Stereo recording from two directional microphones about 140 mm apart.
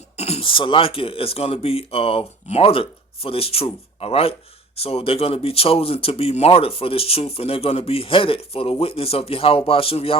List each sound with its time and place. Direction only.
0.2 s speech: 45° left (ahead or behind)